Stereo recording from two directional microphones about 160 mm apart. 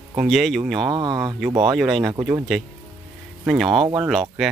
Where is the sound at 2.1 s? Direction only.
25° right (ahead or behind).